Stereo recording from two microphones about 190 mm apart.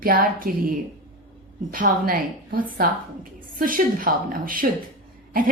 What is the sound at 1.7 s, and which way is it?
Speech, 45° right (ahead or behind).